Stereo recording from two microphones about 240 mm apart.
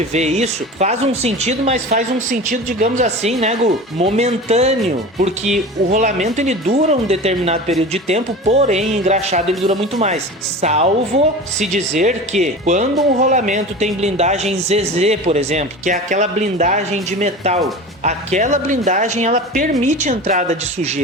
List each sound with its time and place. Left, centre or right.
0.1 s speech: right